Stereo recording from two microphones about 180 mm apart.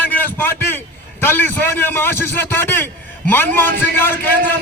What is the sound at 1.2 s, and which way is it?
A man's voice, 10° left (ahead or behind).